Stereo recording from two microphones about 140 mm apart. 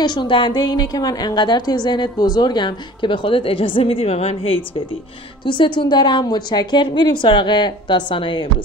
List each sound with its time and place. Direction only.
0.0 s a woman's voice: 30° left (ahead or behind)